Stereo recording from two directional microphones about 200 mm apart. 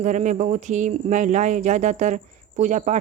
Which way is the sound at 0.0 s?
35° right (ahead or behind).